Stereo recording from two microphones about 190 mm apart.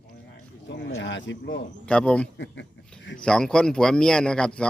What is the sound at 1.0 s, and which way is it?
Speech, 75° left (ahead or behind).